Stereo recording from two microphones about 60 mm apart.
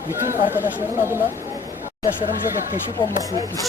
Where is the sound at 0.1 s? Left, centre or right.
Right.